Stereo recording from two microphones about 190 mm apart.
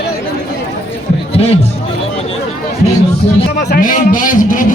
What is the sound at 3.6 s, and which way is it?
A man's voice, 50° left (ahead or behind).